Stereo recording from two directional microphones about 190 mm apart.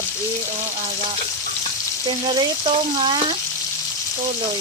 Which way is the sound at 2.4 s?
30° right (ahead or behind).